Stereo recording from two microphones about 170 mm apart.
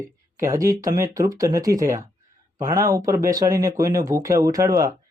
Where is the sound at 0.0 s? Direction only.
20° right (ahead or behind).